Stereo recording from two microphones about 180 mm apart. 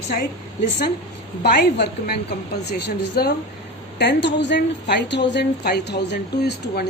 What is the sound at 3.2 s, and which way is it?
Speech, 60° left (ahead or behind).